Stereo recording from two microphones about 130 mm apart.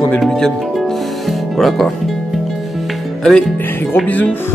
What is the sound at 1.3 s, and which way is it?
Music, centre (ahead or behind).